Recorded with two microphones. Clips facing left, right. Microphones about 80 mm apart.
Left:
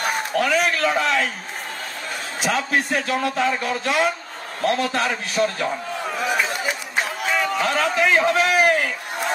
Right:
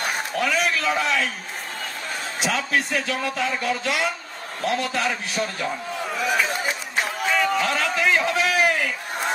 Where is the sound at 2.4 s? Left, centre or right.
Left.